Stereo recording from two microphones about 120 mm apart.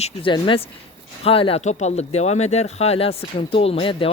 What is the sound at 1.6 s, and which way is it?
Speech, 70° left (ahead or behind).